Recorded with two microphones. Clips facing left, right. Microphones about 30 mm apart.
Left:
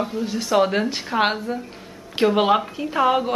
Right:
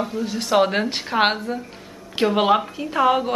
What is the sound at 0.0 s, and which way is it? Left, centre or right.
Speech, centre.